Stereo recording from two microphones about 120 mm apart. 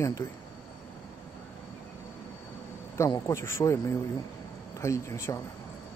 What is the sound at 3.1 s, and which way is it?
Speech, 25° left (ahead or behind).